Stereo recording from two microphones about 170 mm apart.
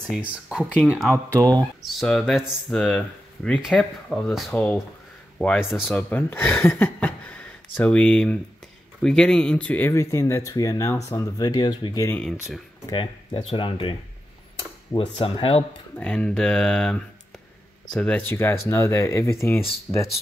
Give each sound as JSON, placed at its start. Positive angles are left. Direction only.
{"t": 0.1, "sound": "speech", "side_deg": -5}
{"t": 5.6, "sound": "speech", "side_deg": -5}
{"t": 5.9, "sound": "speech", "side_deg": 10}
{"t": 12.2, "sound": "speech", "side_deg": 0}
{"t": 12.9, "sound": "speech", "side_deg": 30}
{"t": 16.0, "sound": "speech", "side_deg": 5}
{"t": 19.9, "sound": "speech", "side_deg": -5}